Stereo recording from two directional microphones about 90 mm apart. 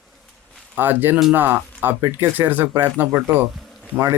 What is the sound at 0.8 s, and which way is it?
Speech, 20° right (ahead or behind).